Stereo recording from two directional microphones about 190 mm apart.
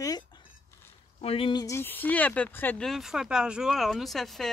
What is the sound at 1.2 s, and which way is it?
Speech, 30° left (ahead or behind).